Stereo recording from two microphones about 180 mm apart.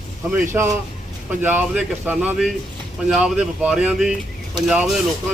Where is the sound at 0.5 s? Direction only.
10° right (ahead or behind).